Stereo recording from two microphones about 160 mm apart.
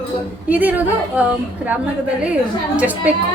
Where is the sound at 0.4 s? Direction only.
10° right (ahead or behind).